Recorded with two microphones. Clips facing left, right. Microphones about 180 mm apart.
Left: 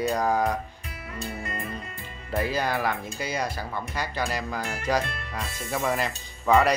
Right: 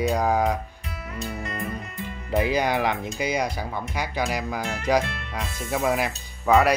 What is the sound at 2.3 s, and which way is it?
Speech, 15° right (ahead or behind).